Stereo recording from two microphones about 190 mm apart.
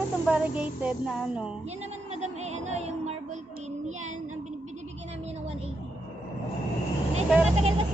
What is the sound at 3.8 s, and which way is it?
Child singing, 40° right (ahead or behind).